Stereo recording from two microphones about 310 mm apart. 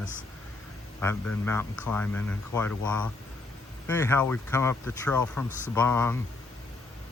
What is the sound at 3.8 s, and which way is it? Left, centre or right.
Speech, centre.